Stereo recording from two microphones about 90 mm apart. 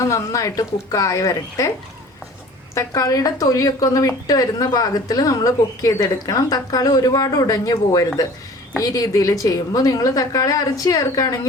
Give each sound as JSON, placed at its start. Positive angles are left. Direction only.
{"t": 0.0, "sound": "a woman's voice", "side_deg": 35}
{"t": 2.7, "sound": "a woman's voice", "side_deg": 40}